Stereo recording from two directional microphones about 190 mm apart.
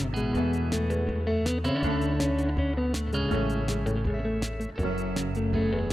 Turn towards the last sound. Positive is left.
turn(degrees=0)  # may be behind; listen again after turning